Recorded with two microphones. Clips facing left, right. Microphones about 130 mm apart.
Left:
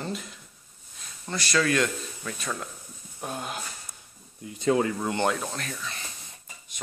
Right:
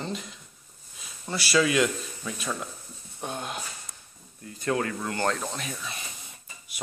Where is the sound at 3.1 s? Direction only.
5° left (ahead or behind).